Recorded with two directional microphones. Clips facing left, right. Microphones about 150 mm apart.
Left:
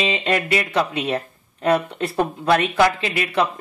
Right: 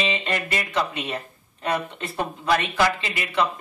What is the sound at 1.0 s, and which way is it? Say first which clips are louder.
Speech: left 7 dB; 60° left (ahead or behind).